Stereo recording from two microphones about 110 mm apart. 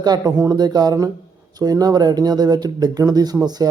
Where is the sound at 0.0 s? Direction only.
35° right (ahead or behind).